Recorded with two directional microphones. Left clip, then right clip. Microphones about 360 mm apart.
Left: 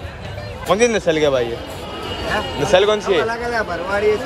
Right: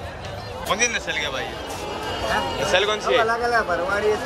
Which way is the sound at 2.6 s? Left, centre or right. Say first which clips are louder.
Left 9 dB; centre.